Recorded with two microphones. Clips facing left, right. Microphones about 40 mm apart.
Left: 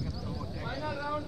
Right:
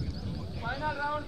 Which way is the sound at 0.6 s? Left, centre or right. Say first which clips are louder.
Right 4 dB; centre.